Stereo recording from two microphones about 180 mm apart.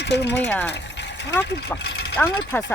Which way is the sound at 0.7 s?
75° left (ahead or behind).